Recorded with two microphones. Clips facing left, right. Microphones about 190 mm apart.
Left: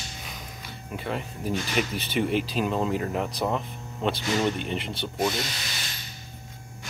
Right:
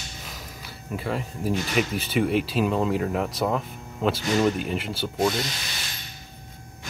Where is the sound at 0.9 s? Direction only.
Centre (ahead or behind).